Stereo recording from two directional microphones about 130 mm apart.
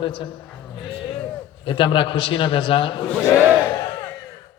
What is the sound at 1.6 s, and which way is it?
A man's voice, 40° left (ahead or behind).